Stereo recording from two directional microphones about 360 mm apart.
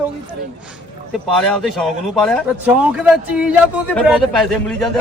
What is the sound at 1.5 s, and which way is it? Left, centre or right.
Speech, centre.